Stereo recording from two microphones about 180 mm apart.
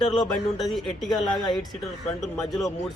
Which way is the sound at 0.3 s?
Centre (ahead or behind).